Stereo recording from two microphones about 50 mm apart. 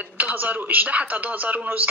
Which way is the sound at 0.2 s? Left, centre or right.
Right.